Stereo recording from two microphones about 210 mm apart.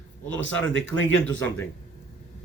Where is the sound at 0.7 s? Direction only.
65° left (ahead or behind).